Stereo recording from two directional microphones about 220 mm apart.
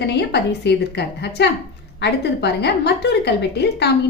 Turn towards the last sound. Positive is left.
turn(degrees=50)  # may be behind; listen again after turning